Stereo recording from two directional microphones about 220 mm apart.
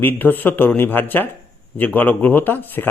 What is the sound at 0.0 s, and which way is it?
Speech, 10° left (ahead or behind).